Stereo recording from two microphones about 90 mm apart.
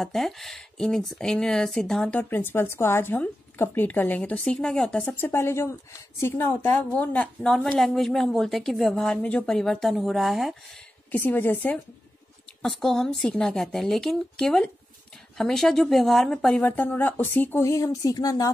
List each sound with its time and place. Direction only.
0.0 s a woman's voice: centre (ahead or behind)
2.0 s speech: 20° left (ahead or behind)
4.2 s speech: 5° left (ahead or behind)
5.0 s speech: 25° left (ahead or behind)
7.4 s a woman's voice: centre (ahead or behind)
11.1 s speech: 20° left (ahead or behind)
12.6 s a woman's voice: 5° left (ahead or behind)
16.6 s speech: 20° left (ahead or behind)
17.6 s speech: 40° left (ahead or behind)